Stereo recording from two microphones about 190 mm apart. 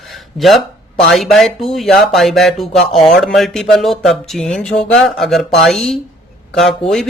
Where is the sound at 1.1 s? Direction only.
Centre (ahead or behind).